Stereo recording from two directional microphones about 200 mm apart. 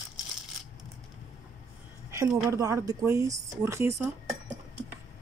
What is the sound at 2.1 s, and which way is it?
A woman's voice, 15° right (ahead or behind).